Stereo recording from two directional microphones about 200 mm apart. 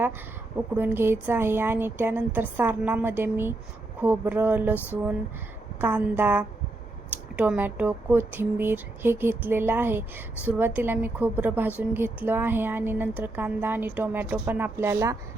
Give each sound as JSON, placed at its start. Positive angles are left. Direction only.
{"t": 0.8, "sound": "a woman's voice", "side_deg": -10}